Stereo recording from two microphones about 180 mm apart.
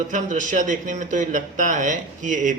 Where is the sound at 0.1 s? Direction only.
45° right (ahead or behind).